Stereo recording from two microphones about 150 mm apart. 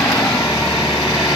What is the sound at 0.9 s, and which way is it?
Vehicle, 25° left (ahead or behind).